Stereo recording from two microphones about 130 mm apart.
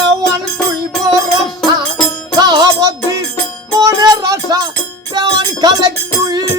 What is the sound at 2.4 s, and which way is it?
Music, 30° right (ahead or behind).